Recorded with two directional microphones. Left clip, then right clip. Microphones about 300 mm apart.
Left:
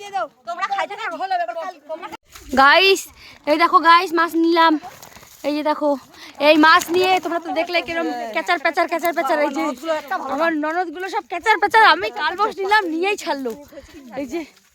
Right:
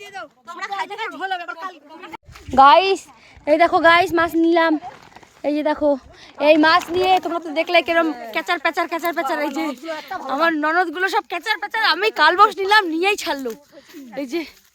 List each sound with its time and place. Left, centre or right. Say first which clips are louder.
0.4 s speech: left 1 dB; centre
0.9 s speech: left 3 dB; centre
8.3 s speech: left 1 dB; centre
11.4 s speech: left 7 dB; centre
11.9 s speech: right 7 dB; centre